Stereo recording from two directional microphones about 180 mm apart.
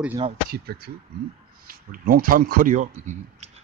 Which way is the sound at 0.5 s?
60° right (ahead or behind).